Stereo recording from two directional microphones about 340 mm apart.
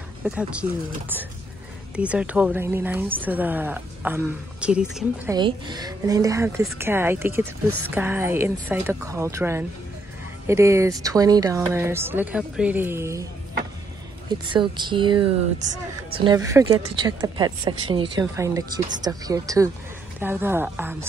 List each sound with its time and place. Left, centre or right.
0.2 s a woman's voice: centre
14.5 s speech: centre
15.6 s speech: right
16.2 s a woman's voice: centre